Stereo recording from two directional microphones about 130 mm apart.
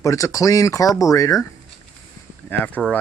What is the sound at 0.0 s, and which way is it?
Speech, 25° left (ahead or behind).